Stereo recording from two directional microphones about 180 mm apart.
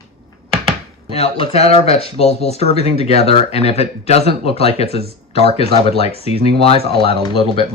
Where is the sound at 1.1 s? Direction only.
35° left (ahead or behind).